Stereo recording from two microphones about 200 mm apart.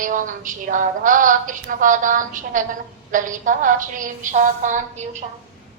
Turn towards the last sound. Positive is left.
turn(degrees=-35)  # may be behind; listen again after turning